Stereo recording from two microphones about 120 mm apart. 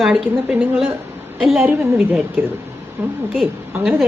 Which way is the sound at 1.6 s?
20° right (ahead or behind).